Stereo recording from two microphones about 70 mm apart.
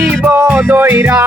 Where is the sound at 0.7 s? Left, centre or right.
Right.